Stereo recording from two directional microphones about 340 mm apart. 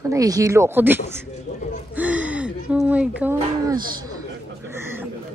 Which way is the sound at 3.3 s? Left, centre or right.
Centre.